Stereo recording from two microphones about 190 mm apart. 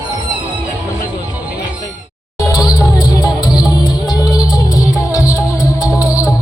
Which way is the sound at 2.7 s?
20° left (ahead or behind).